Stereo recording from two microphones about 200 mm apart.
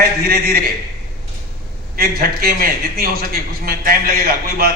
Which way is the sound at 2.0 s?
50° right (ahead or behind).